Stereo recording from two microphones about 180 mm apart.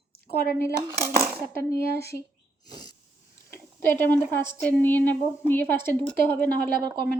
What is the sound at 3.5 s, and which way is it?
A woman's voice, 10° left (ahead or behind).